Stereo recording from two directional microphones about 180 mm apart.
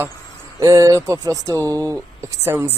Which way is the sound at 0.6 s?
20° right (ahead or behind).